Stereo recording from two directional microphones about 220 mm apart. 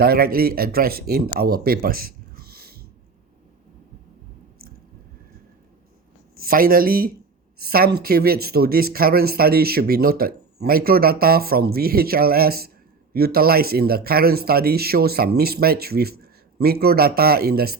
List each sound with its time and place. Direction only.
0.0 s speech: 45° right (ahead or behind)
6.3 s speech: 40° right (ahead or behind)